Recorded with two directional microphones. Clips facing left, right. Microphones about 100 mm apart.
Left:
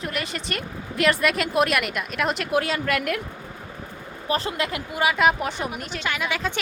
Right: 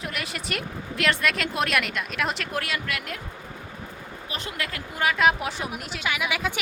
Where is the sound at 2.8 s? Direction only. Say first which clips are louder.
Left 8 dB; 55° left (ahead or behind).